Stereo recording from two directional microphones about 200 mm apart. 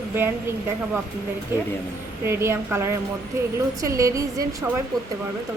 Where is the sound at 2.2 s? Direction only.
10° right (ahead or behind).